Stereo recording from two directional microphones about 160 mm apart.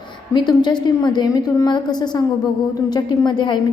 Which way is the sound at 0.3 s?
25° left (ahead or behind).